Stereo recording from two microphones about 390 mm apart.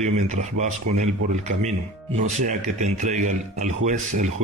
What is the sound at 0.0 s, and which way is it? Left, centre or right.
Speech, centre.